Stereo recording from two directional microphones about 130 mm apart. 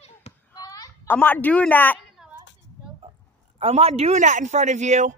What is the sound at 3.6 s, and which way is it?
A man's voice, 50° right (ahead or behind).